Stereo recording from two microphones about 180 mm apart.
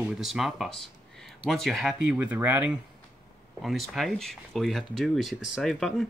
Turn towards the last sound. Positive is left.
turn(degrees=0)  # may be behind; listen again after turning